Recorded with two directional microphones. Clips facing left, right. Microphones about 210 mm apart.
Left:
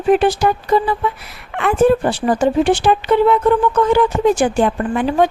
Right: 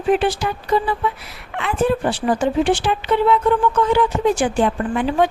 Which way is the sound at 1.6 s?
50° left (ahead or behind).